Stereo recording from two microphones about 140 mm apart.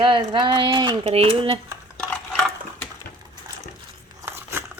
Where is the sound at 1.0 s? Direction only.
45° right (ahead or behind).